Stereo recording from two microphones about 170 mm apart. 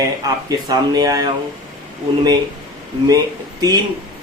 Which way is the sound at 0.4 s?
20° right (ahead or behind).